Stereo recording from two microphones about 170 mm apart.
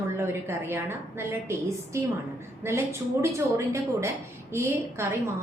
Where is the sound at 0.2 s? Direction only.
15° right (ahead or behind).